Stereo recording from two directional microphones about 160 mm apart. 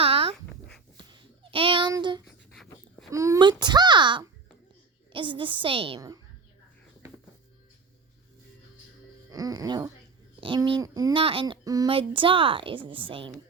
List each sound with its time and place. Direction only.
0.0 s dog: 35° right (ahead or behind)
1.5 s child singing: 35° right (ahead or behind)
1.9 s a child's voice: 25° right (ahead or behind)
9.3 s a child's voice: 25° right (ahead or behind)
11.1 s a woman's voice: 35° right (ahead or behind)
11.6 s speech: 25° right (ahead or behind)
11.9 s a woman's voice: 35° right (ahead or behind)